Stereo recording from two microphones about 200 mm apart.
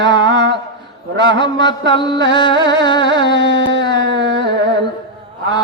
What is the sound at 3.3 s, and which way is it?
Carnatic music, 60° right (ahead or behind).